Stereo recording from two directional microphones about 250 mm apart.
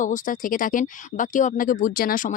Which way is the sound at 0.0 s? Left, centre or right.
Left.